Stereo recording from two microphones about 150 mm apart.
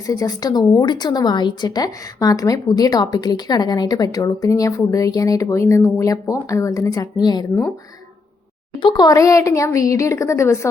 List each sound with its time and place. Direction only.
0.1 s speech: 25° left (ahead or behind)
8.8 s speech: 30° left (ahead or behind)